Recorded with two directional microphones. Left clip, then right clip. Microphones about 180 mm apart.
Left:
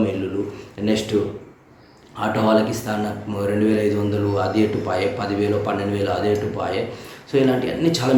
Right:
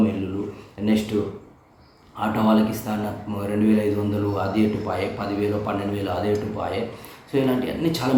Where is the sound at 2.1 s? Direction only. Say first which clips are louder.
Left 3 dB; 15° right (ahead or behind).